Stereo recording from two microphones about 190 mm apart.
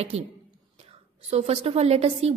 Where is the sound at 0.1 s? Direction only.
35° right (ahead or behind).